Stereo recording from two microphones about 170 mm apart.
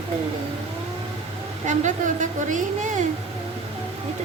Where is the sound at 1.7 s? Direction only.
45° right (ahead or behind).